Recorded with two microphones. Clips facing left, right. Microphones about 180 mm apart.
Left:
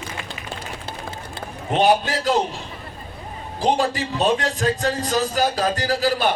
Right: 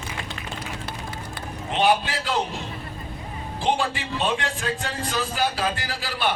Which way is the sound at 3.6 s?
40° left (ahead or behind).